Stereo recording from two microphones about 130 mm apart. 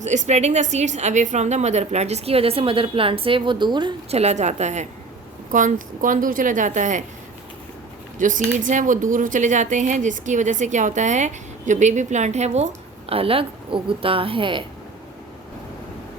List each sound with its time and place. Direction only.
0.0 s a woman's voice: 65° right (ahead or behind); by 3.9 s 35° right (ahead or behind)
4.1 s a woman's voice: 55° right (ahead or behind)
5.5 s a woman's voice: 80° right
8.2 s speech: 85° right; by 14.6 s 40° right (ahead or behind)